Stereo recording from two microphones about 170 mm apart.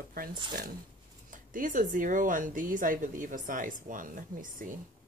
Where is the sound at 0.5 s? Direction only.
60° right (ahead or behind).